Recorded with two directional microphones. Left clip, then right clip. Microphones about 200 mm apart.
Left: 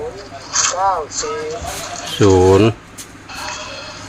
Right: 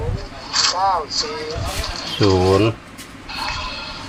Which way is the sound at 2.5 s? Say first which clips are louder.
Left 4 dB; 45° left (ahead or behind).